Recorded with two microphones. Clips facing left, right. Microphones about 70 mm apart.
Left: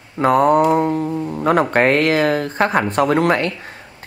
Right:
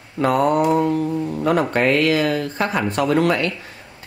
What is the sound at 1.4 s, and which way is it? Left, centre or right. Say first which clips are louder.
Speech: left 4 dB; left.